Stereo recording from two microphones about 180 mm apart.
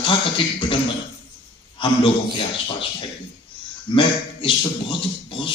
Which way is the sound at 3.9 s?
30° left (ahead or behind).